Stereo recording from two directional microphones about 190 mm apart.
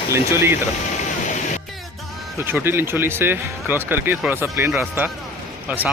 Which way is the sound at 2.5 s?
10° right (ahead or behind).